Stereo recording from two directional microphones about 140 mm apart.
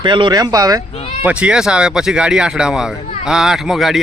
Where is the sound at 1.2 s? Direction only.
10° right (ahead or behind).